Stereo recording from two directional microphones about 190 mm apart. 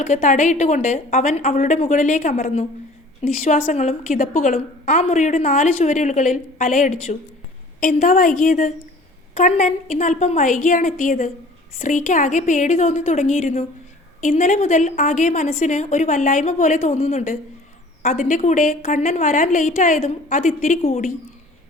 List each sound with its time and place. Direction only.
0.0 s a woman's voice: 40° left (ahead or behind)